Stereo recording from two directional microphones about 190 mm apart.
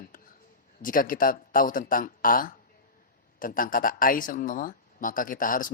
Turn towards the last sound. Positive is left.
turn(degrees=45)  # may be behind; listen again after turning